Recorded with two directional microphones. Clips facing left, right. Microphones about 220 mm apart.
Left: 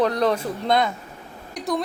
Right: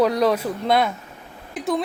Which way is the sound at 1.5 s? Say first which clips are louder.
Right 2 dB; centre (ahead or behind).